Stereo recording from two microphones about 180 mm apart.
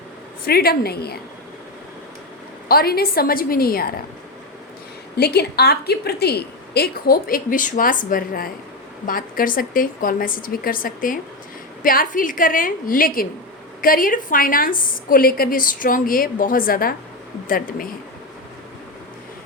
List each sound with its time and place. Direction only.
0.4 s a woman's voice: 60° left (ahead or behind)
2.6 s a woman's voice: 55° left (ahead or behind)
5.1 s a woman's voice: 65° left (ahead or behind)